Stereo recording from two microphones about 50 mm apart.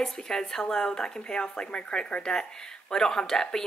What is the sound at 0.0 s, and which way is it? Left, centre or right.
A woman's voice, centre.